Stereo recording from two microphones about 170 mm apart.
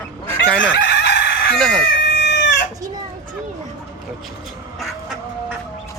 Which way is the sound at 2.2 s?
90° left.